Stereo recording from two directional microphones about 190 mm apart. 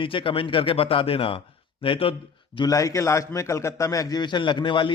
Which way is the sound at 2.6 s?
20° left (ahead or behind).